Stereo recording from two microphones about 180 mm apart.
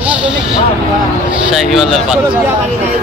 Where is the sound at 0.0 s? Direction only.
5° right (ahead or behind).